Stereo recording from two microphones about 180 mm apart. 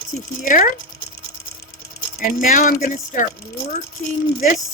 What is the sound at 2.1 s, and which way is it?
Speech, 50° left (ahead or behind).